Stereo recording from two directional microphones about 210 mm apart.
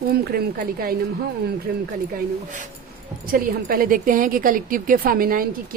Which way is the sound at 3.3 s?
45° right (ahead or behind).